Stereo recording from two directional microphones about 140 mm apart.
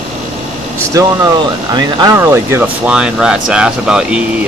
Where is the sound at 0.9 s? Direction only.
25° right (ahead or behind).